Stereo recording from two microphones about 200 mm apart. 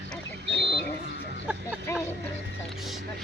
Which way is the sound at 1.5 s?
5° right (ahead or behind).